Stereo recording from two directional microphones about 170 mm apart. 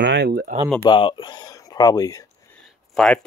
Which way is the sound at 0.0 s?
85° right.